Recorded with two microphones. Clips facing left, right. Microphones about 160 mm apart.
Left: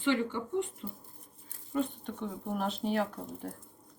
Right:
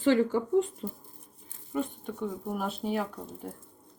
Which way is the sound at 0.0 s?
40° right (ahead or behind).